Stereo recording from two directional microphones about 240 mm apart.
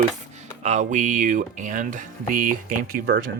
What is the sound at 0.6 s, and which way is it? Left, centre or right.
Speech, right.